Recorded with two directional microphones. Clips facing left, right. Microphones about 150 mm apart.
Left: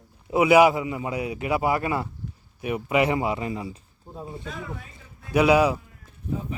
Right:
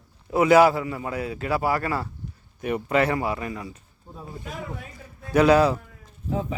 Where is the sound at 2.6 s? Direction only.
10° left (ahead or behind).